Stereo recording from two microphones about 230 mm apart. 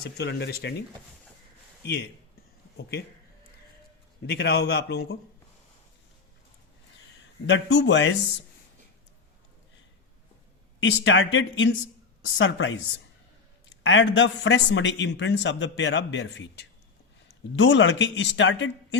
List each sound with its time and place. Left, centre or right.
0.0 s a man's voice: left
1.8 s speech: left
4.3 s a man's voice: left
7.4 s a man's voice: left
10.8 s a man's voice: left